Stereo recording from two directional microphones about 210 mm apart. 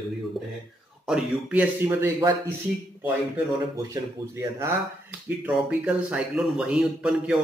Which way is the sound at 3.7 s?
15° right (ahead or behind).